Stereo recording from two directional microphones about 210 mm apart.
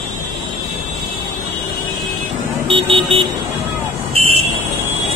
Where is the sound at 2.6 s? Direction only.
25° right (ahead or behind).